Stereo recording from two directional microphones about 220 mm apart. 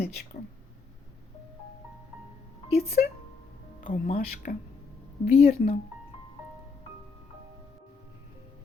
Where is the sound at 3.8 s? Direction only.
40° left (ahead or behind).